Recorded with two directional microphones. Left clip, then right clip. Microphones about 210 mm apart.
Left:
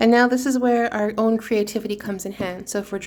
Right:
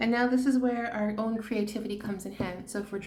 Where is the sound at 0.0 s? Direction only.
55° left (ahead or behind).